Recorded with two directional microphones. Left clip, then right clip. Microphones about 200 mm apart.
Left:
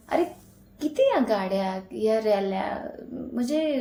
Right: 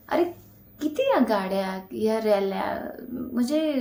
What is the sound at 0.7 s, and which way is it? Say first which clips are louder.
Speech: left 1 dB; 15° right (ahead or behind).